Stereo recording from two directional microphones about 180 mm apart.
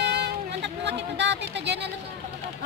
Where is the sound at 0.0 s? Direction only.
70° right (ahead or behind).